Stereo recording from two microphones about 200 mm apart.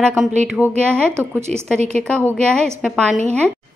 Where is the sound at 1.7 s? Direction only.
35° right (ahead or behind).